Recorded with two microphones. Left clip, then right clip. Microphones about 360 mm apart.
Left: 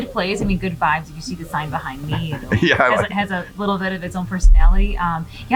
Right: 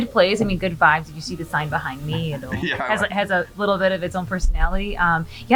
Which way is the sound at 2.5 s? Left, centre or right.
Left.